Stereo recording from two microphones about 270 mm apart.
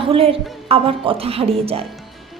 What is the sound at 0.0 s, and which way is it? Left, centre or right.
A woman's voice, centre.